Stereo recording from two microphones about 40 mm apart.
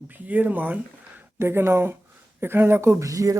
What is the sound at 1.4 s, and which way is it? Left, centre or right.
Speech, right.